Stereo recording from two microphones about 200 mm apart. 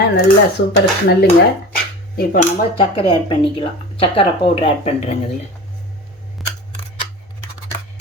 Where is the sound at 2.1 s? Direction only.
40° left (ahead or behind).